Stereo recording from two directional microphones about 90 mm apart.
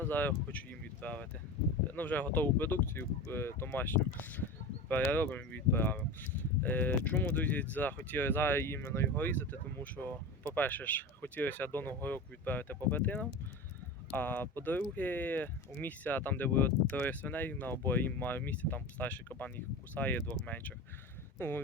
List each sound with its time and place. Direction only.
0.0 s speech: 20° left (ahead or behind)